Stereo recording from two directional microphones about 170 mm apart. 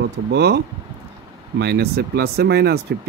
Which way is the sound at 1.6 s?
75° right (ahead or behind).